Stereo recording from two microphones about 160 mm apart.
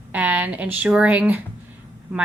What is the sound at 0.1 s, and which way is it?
A woman's voice, 10° right (ahead or behind).